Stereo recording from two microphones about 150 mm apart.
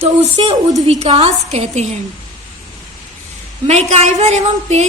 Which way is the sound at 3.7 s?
45° right (ahead or behind).